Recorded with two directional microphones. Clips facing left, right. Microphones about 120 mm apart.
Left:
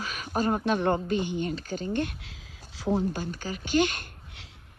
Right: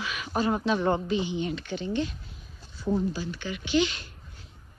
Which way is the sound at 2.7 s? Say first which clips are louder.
Left 1 dB; 90° left.